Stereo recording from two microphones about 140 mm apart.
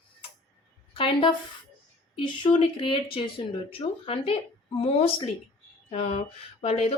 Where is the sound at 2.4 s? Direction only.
40° left (ahead or behind).